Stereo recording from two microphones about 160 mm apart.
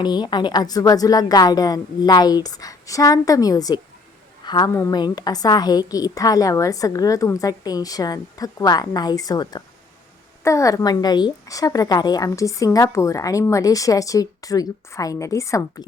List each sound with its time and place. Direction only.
0.0 s a woman's voice: 30° left (ahead or behind)